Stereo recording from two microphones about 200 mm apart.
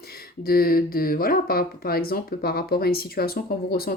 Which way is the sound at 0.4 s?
50° left (ahead or behind).